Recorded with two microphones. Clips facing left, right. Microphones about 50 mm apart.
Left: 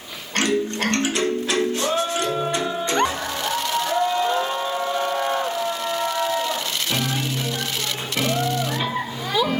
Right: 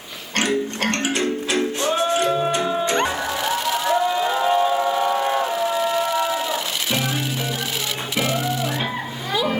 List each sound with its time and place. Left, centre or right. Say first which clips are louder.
0.9 s music: even; right
3.4 s a sound: right 1 dB; centre
8.2 s music: left 1 dB; centre